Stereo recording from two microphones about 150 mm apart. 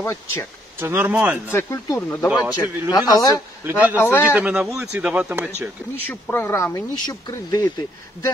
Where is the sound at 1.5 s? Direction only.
15° left (ahead or behind).